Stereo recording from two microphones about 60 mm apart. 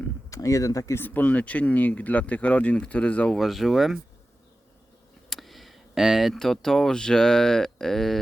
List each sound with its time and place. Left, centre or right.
0.3 s speech: left
0.9 s speech: left
3.3 s speech: centre
5.3 s speech: centre